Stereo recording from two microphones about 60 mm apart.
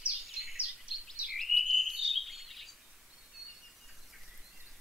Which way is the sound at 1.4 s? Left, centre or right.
Centre.